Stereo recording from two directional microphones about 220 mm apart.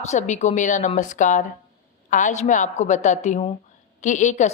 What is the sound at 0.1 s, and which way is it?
Speech, 30° left (ahead or behind).